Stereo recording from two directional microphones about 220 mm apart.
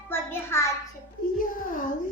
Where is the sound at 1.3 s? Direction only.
40° left (ahead or behind).